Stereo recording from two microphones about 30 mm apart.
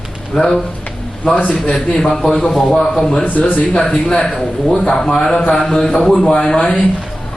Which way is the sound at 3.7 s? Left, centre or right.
Left.